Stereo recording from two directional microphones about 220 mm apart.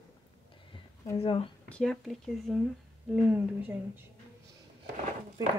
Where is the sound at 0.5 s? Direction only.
20° left (ahead or behind).